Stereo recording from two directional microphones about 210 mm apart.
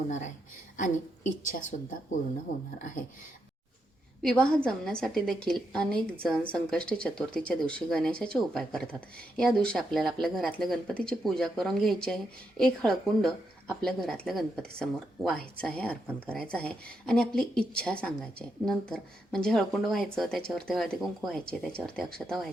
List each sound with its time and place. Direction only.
0.8 s a woman's voice: 40° left (ahead or behind)
4.2 s speech: 5° left (ahead or behind)